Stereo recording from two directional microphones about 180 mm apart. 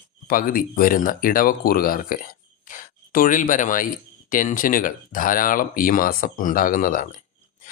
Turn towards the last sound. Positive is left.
turn(degrees=45)  # may be behind; listen again after turning